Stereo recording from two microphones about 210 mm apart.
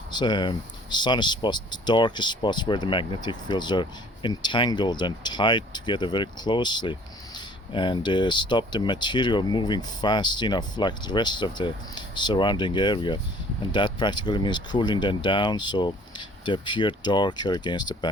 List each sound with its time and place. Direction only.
0.1 s speech: 20° left (ahead or behind)